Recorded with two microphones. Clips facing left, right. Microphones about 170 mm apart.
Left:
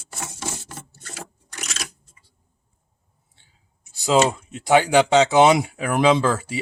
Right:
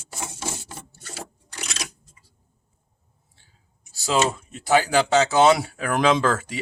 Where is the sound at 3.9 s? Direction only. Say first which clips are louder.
Left 4 dB; 20° left (ahead or behind).